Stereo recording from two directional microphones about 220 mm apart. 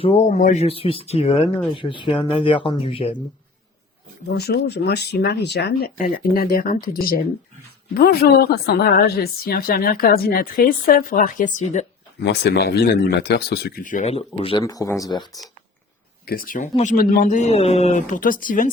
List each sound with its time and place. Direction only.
0.0 s speech: 30° left (ahead or behind)
4.3 s a woman's voice: 50° left (ahead or behind)
12.2 s speech: 50° left (ahead or behind); by 14.6 s 25° left (ahead or behind)
14.6 s speech: 15° left (ahead or behind)
16.2 s a woman's voice: 40° left (ahead or behind)